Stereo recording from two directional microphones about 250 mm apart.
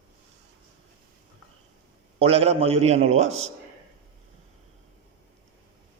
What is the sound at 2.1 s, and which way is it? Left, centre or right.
A man's voice, right.